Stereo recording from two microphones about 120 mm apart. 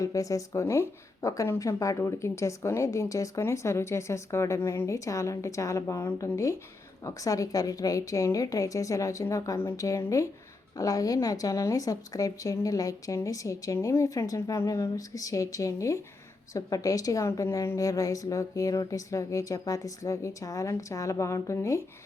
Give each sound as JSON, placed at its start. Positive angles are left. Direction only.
{"t": 0.0, "sound": "speech", "side_deg": 25}